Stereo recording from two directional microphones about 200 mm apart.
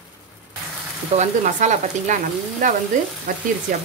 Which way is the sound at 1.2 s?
35° right (ahead or behind).